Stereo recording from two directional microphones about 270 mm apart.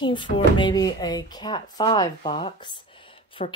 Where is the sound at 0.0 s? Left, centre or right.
Centre.